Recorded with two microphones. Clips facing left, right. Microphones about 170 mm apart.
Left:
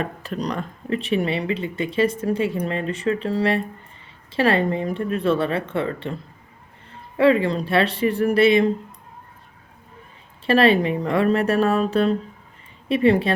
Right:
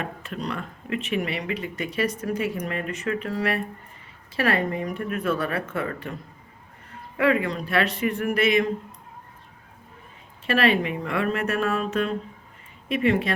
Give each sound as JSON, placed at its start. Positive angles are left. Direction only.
{"t": 0.0, "sound": "speech", "side_deg": 35}
{"t": 7.2, "sound": "speech", "side_deg": 30}
{"t": 10.4, "sound": "speech", "side_deg": 30}